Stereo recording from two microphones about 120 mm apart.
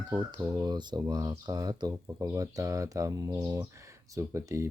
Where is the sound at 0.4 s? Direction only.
30° right (ahead or behind).